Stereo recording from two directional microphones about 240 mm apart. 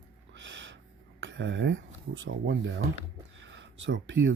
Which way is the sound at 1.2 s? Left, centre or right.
Right.